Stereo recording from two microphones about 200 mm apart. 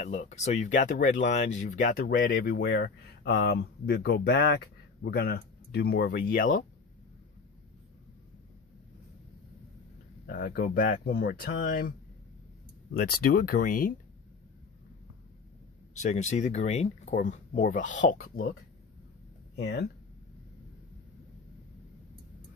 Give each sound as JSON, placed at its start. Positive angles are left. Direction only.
{"t": 0.0, "sound": "speech", "side_deg": 35}
{"t": 10.2, "sound": "speech", "side_deg": 45}
{"t": 12.9, "sound": "speech", "side_deg": 50}
{"t": 16.0, "sound": "speech", "side_deg": 35}